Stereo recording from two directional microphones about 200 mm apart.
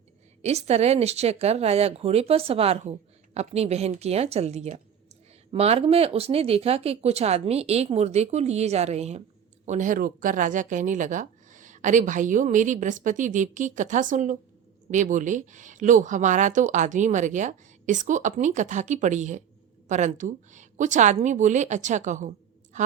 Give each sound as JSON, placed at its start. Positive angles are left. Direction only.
{"t": 0.4, "sound": "speech", "side_deg": -30}